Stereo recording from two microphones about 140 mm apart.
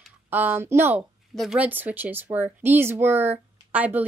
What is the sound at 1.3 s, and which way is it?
Speech, centre (ahead or behind).